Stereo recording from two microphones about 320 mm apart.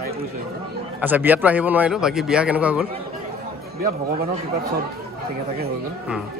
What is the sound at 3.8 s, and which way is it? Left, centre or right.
Speech, right.